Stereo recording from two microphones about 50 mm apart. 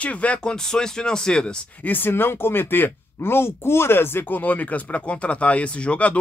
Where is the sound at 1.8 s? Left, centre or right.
Left.